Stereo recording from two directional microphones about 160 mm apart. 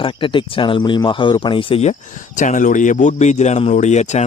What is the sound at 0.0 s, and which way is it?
Speech, 30° left (ahead or behind).